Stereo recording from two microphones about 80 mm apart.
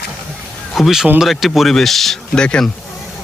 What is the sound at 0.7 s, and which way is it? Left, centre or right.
A man's voice, centre.